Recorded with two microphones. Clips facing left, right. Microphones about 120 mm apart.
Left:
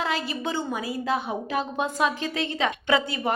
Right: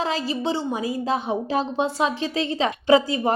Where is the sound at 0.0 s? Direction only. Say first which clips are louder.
Right 3 dB; 30° right (ahead or behind).